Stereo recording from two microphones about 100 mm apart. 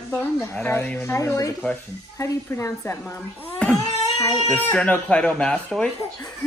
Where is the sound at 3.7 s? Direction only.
35° left (ahead or behind).